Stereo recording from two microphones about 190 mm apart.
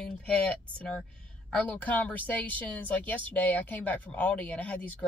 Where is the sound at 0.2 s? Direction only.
5° left (ahead or behind).